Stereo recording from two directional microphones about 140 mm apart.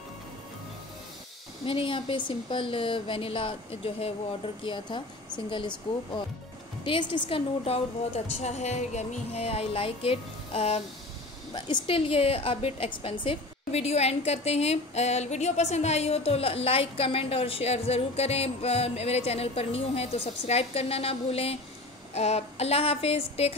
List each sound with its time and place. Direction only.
1.7 s a woman's voice: 40° left (ahead or behind)
6.8 s a woman's voice: 35° left (ahead or behind)